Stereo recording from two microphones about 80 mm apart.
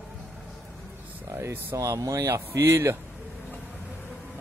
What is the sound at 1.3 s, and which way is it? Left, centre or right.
Speech, right.